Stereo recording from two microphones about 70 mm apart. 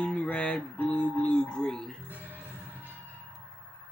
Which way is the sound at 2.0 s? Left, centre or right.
Right.